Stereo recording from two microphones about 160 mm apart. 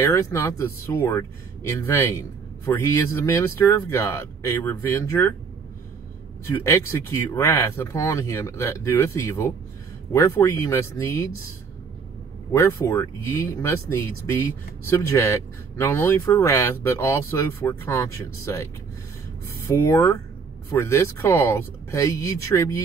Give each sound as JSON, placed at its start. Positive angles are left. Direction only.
{"t": 0.0, "sound": "speech", "side_deg": 20}
{"t": 6.4, "sound": "speech", "side_deg": 15}
{"t": 12.5, "sound": "speech", "side_deg": 15}